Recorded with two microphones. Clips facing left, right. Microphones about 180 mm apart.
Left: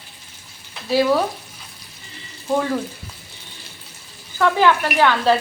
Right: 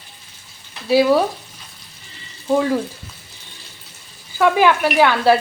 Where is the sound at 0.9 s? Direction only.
10° right (ahead or behind).